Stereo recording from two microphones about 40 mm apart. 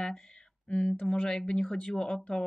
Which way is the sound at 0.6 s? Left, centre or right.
Left.